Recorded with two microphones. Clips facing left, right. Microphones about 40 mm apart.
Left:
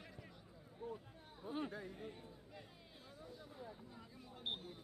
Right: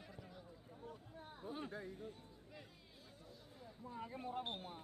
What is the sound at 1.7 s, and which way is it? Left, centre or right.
Speech, centre.